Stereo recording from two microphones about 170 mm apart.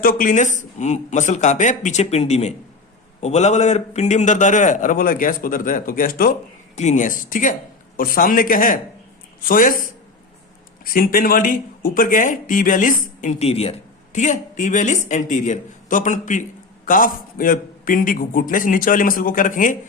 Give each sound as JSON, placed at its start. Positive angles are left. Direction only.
{"t": 0.0, "sound": "a man's voice", "side_deg": 50}
{"t": 6.7, "sound": "a man's voice", "side_deg": 45}
{"t": 10.8, "sound": "a man's voice", "side_deg": 55}